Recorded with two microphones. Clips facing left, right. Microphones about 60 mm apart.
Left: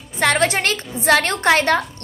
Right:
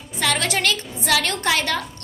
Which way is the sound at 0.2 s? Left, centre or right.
Left.